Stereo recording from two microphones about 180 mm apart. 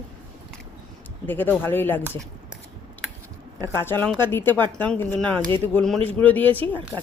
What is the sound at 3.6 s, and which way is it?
Speech, 15° left (ahead or behind).